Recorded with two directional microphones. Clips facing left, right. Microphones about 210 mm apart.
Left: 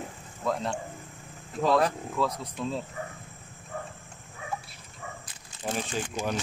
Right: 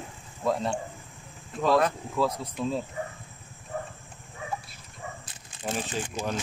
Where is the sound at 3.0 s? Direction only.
25° right (ahead or behind).